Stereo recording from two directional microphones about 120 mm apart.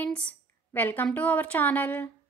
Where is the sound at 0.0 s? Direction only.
10° left (ahead or behind).